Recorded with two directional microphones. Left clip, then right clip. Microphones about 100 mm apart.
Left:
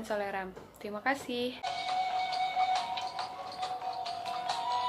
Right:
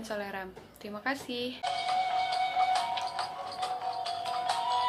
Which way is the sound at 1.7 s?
40° right (ahead or behind).